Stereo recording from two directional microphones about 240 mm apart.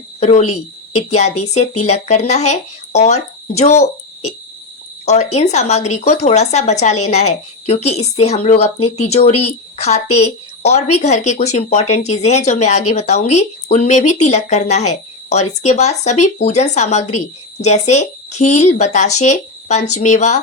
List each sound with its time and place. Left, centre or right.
0.2 s speech: left
9.3 s speech: left
9.7 s a woman's voice: left